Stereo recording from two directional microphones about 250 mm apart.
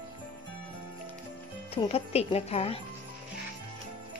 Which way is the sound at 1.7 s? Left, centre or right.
Left.